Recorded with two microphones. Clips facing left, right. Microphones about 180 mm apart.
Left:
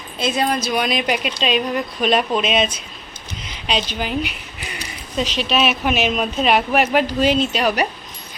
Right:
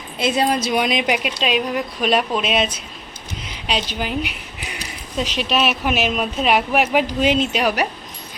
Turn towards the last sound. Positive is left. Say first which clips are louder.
# left 1 dB
turn(degrees=-5)  # may be behind; listen again after turning